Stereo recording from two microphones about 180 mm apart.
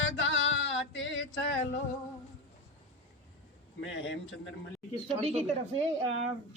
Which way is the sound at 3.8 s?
90° left.